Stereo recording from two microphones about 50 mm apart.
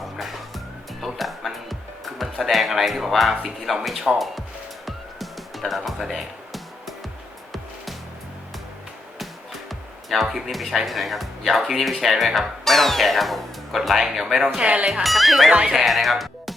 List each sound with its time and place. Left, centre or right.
0.0 s music: centre
2.1 s speech: centre
4.9 s music: centre
9.6 s speech: centre
14.6 s speech: right
15.0 s speech: centre